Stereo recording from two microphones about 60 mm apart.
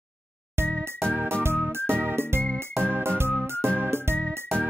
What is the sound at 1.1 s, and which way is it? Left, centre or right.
Music, right.